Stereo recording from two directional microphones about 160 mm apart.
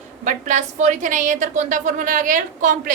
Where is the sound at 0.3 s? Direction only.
50° right (ahead or behind).